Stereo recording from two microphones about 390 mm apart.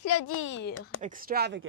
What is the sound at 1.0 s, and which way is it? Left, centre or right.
Speech, right.